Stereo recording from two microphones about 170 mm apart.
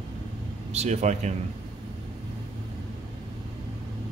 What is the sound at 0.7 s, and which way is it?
Speech, 40° right (ahead or behind).